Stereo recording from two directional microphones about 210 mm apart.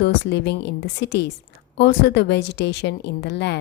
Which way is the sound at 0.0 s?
55° left (ahead or behind).